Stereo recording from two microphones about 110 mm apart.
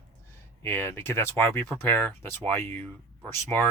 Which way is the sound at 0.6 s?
20° left (ahead or behind).